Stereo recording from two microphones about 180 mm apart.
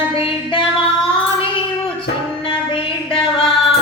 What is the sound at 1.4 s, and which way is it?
Child singing, 30° left (ahead or behind).